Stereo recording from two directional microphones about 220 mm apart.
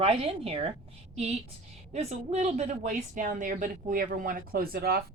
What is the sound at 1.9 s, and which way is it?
Speech, 30° right (ahead or behind).